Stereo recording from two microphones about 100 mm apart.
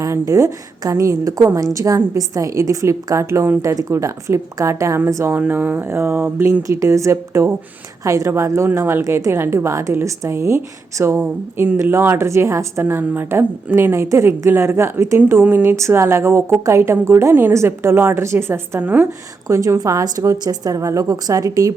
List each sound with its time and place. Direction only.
0.0 s a woman's voice: 35° right (ahead or behind)
11.2 s a woman's voice: 20° right (ahead or behind)
19.5 s a woman's voice: 30° right (ahead or behind)